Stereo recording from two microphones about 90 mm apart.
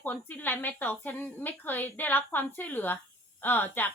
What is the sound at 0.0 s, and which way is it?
A woman's voice, 20° left (ahead or behind).